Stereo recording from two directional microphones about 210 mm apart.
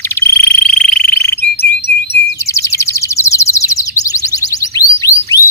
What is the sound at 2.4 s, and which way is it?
Bird, 15° left (ahead or behind).